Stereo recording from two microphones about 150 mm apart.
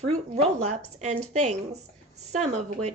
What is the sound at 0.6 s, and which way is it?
A woman's voice, 50° right (ahead or behind).